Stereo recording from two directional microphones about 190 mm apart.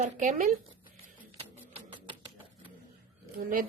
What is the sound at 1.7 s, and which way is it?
Music, 25° right (ahead or behind).